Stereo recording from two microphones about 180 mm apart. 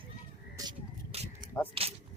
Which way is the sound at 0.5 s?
20° right (ahead or behind).